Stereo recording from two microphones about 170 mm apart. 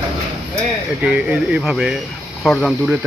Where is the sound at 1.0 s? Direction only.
5° right (ahead or behind).